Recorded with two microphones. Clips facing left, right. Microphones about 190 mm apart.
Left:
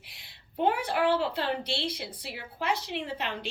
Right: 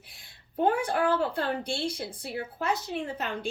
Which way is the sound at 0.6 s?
45° right (ahead or behind).